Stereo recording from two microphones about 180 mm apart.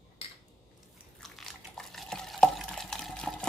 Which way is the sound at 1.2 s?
Centre (ahead or behind).